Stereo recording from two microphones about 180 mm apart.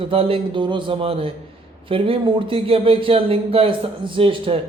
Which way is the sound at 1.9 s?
30° right (ahead or behind).